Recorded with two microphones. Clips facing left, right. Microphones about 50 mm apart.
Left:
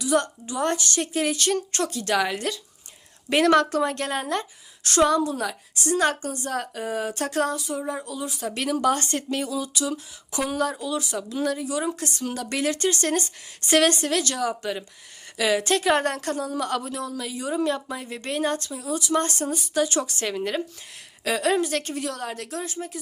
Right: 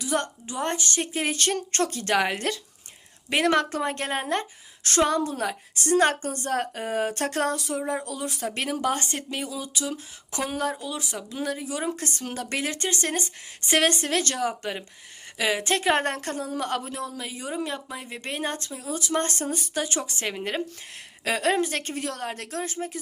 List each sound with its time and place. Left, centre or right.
0.0 s speech: right
1.3 s a woman's voice: right
3.2 s a woman's voice: centre; by 7.6 s right
7.7 s a sound: right
8.0 s speech: right
8.4 s a woman's voice: right
17.5 s a woman's voice: centre; by 23.0 s right